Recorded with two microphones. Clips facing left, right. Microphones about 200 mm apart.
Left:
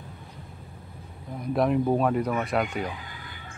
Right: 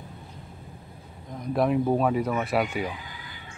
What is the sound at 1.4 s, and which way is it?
Speech, centre (ahead or behind).